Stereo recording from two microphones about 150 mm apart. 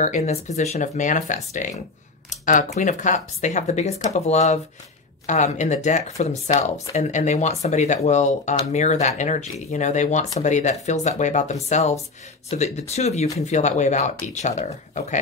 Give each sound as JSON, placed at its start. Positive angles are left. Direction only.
{"t": 0.0, "sound": "speech", "side_deg": 50}